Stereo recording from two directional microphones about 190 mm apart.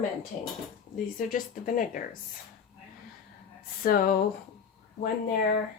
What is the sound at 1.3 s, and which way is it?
Speech, 45° left (ahead or behind).